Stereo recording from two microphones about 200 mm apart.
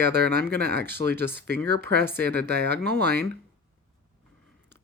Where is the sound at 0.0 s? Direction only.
55° right (ahead or behind).